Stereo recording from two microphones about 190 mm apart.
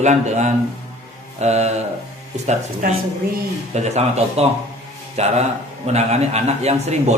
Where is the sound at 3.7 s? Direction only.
35° right (ahead or behind).